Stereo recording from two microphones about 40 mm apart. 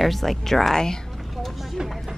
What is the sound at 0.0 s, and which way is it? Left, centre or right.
Speech, centre.